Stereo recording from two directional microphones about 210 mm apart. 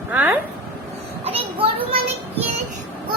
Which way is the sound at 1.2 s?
25° right (ahead or behind).